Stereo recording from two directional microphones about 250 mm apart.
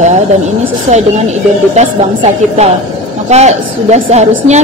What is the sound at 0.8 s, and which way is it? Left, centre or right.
A woman's voice, right.